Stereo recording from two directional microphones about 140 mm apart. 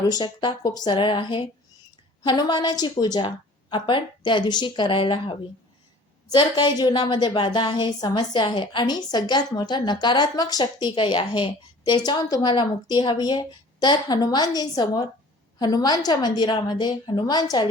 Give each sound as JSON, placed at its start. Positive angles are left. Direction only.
{"t": 0.0, "sound": "a woman's voice", "side_deg": 30}